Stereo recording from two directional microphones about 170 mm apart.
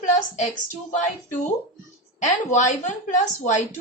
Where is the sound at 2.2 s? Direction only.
45° left (ahead or behind).